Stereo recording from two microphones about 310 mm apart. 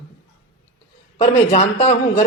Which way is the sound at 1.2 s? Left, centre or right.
Left.